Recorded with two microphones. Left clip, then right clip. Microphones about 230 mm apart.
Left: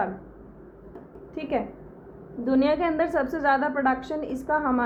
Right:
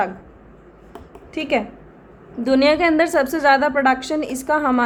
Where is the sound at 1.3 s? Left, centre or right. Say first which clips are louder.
Right 7 dB; right.